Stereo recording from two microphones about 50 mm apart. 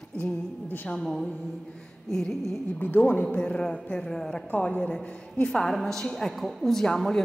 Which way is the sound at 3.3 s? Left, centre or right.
Left.